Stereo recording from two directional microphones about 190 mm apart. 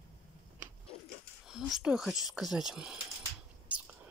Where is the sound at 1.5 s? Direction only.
Centre (ahead or behind).